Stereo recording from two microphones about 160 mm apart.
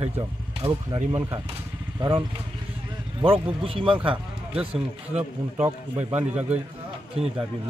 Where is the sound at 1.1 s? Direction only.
20° right (ahead or behind).